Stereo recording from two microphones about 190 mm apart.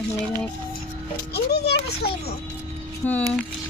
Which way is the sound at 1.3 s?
60° left (ahead or behind).